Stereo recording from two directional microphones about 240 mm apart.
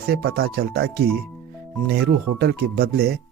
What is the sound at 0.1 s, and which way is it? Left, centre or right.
Speech, right.